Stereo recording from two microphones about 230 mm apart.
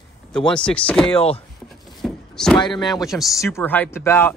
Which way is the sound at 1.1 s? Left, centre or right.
Left.